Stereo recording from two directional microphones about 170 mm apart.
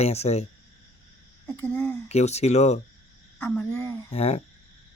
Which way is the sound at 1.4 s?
10° left (ahead or behind).